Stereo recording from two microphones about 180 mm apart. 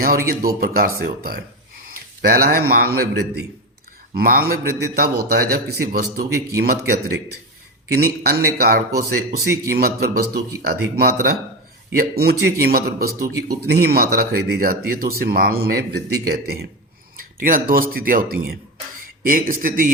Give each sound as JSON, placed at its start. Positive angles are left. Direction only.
{"t": 0.0, "sound": "speech", "side_deg": -55}